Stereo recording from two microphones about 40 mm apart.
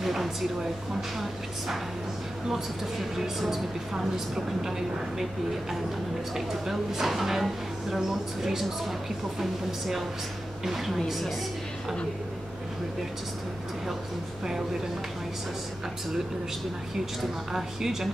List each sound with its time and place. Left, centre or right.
0.0 s a sound: centre
3.2 s speech: centre
4.6 s speech: centre
16.9 s speech: centre